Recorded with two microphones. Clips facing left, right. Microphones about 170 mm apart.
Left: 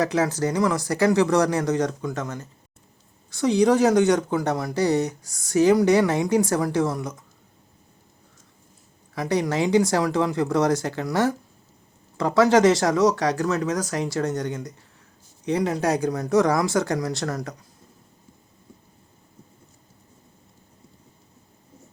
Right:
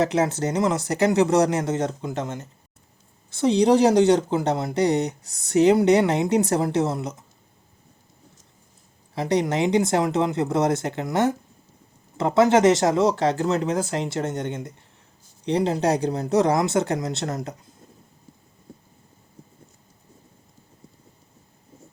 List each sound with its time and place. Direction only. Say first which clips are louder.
0.0 s speech: right 1 dB; 25° right (ahead or behind)
9.1 s speech: right 1 dB; 25° right (ahead or behind)